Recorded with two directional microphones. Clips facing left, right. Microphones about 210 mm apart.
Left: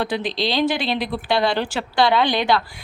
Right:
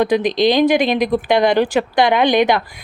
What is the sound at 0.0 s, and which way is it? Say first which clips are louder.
Speech: right 9 dB; 15° right (ahead or behind).